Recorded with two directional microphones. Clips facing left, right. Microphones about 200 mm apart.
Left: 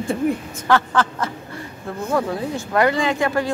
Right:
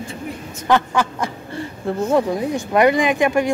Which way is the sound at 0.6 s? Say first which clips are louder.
Right 1 dB; 15° right (ahead or behind).